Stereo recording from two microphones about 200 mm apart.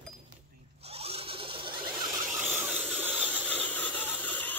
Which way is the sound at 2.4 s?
10° right (ahead or behind).